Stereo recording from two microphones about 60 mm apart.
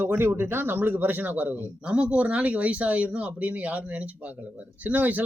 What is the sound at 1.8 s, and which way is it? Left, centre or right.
Speech, centre.